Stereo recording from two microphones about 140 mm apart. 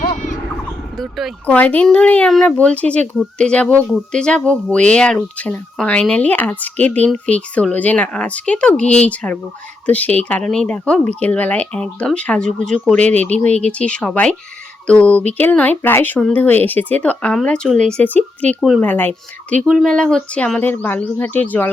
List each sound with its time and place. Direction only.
0.0 s a sound: 85° left
0.9 s speech: centre (ahead or behind)
1.5 s speech: 10° left (ahead or behind)